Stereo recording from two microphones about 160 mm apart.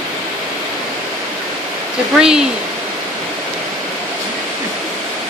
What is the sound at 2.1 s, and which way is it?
Speech, 5° right (ahead or behind).